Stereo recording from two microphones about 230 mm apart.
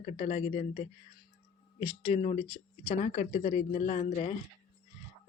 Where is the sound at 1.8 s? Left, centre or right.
Left.